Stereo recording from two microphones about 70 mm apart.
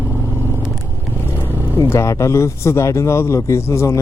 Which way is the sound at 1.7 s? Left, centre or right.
Left.